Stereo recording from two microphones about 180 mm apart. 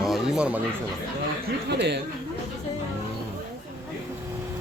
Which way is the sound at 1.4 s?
70° right (ahead or behind).